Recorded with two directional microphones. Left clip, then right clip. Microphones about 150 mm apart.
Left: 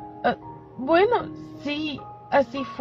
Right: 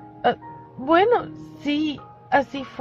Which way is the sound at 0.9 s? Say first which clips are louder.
Right 2 dB; 45° right (ahead or behind).